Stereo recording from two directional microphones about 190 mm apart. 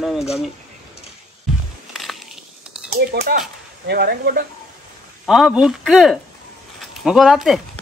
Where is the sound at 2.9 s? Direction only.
55° right (ahead or behind).